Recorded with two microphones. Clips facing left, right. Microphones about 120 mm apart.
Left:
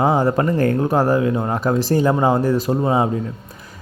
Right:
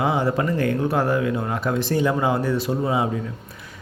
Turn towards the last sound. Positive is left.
turn(degrees=40)  # may be behind; listen again after turning